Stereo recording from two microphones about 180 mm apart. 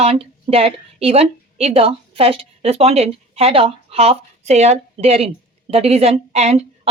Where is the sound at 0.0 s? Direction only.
35° right (ahead or behind).